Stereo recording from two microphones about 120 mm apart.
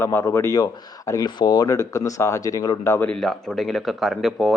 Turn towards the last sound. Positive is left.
turn(degrees=0)  # may be behind; listen again after turning